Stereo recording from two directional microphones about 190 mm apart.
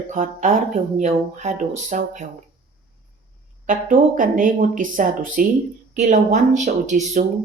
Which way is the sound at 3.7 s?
45° right (ahead or behind).